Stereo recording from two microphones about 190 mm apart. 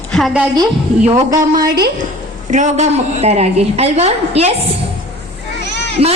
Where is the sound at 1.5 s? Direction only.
55° right (ahead or behind).